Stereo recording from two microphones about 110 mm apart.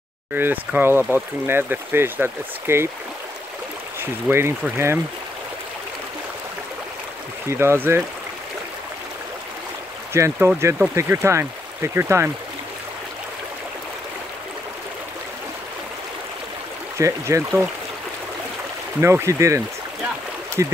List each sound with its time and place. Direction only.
0.3 s speech: 15° right (ahead or behind)
4.0 s speech: 20° right (ahead or behind)
7.4 s speech: 20° right (ahead or behind)
10.1 s speech: 25° right (ahead or behind)
17.0 s speech: 30° right (ahead or behind)
18.9 s speech: 25° right (ahead or behind)